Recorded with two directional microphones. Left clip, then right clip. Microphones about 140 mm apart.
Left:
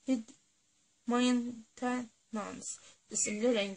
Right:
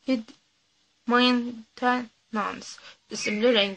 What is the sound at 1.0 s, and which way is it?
Speech, 20° left (ahead or behind).